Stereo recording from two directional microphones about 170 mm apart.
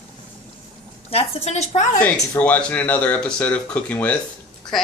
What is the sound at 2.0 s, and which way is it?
A child's voice, 10° left (ahead or behind).